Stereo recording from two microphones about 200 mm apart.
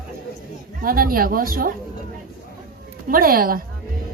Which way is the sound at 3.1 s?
45° right (ahead or behind).